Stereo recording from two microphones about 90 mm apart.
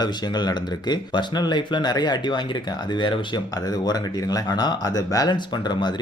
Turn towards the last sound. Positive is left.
turn(degrees=55)  # may be behind; listen again after turning